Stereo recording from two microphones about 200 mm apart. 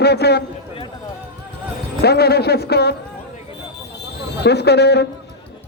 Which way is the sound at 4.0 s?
55° left (ahead or behind).